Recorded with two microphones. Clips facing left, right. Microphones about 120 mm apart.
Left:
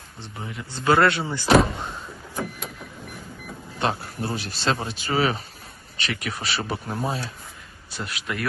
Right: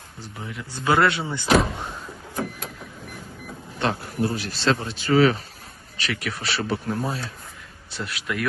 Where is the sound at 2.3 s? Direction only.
Centre (ahead or behind).